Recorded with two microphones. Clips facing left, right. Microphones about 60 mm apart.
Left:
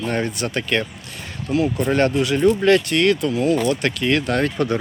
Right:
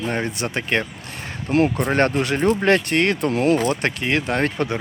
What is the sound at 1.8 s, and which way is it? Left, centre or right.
Speech, right.